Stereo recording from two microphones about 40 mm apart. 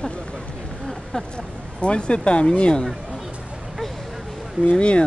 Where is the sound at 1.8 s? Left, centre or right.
Left.